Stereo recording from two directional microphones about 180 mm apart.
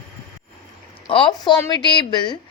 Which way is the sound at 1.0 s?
25° left (ahead or behind).